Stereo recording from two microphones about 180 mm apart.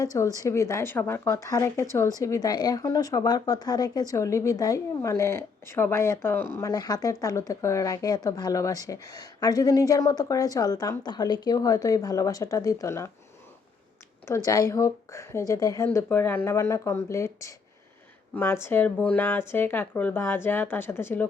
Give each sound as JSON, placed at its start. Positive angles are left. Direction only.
{"t": 0.0, "sound": "a woman's voice", "side_deg": 20}
{"t": 14.3, "sound": "speech", "side_deg": 15}